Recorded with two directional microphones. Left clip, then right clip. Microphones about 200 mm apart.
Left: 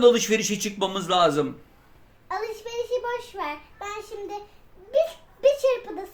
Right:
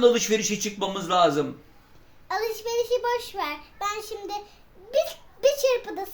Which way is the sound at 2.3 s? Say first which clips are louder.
Right 3 dB; 40° right (ahead or behind).